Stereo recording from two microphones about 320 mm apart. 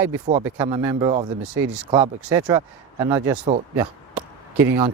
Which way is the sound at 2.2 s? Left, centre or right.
Centre.